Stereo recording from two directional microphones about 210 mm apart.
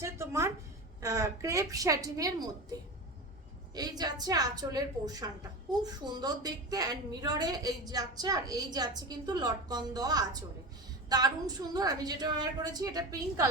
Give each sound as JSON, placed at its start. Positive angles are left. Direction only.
{"t": 0.0, "sound": "a woman's voice", "side_deg": -15}
{"t": 3.8, "sound": "a woman's voice", "side_deg": -20}